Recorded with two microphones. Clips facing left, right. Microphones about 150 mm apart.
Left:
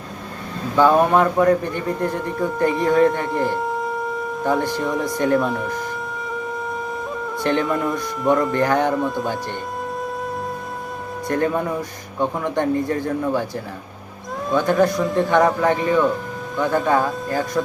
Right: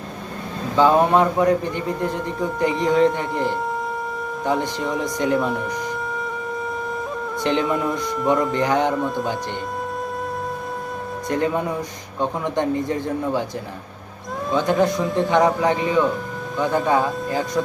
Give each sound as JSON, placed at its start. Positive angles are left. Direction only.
{"t": 0.8, "sound": "a man's voice", "side_deg": -20}
{"t": 5.4, "sound": "speech", "side_deg": 0}
{"t": 7.4, "sound": "a man's voice", "side_deg": -20}
{"t": 7.7, "sound": "speech", "side_deg": 0}
{"t": 8.5, "sound": "a man's voice", "side_deg": -20}
{"t": 9.0, "sound": "speech", "side_deg": 0}
{"t": 11.3, "sound": "a man's voice", "side_deg": -15}
{"t": 14.5, "sound": "a man's voice", "side_deg": -20}